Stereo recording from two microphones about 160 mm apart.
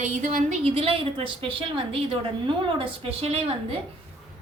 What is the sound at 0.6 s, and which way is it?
A woman's voice, 35° right (ahead or behind).